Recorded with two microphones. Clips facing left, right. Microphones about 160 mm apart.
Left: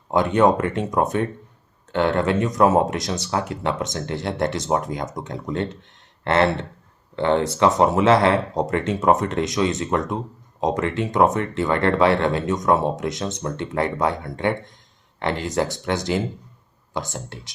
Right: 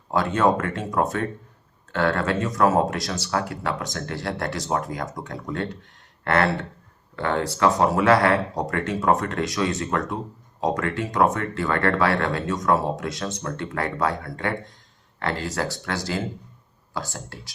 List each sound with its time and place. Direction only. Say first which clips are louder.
0.1 s speech: left 3 dB; 20° left (ahead or behind)